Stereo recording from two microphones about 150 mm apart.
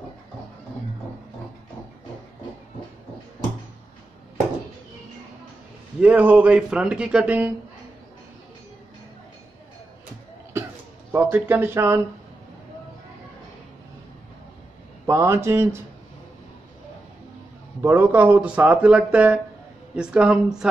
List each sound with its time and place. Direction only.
5.9 s speech: 10° right (ahead or behind)
11.1 s speech: 15° right (ahead or behind)
15.0 s speech: 20° right (ahead or behind)
17.8 s speech: 15° right (ahead or behind)